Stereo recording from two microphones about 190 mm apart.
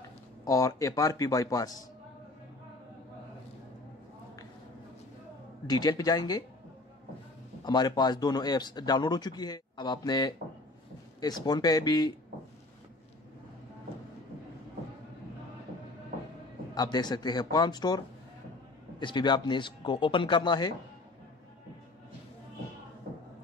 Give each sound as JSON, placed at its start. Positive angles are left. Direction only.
{"t": 0.5, "sound": "speech", "side_deg": 15}
{"t": 5.7, "sound": "speech", "side_deg": 20}
{"t": 7.6, "sound": "speech", "side_deg": 20}
{"t": 16.7, "sound": "speech", "side_deg": 20}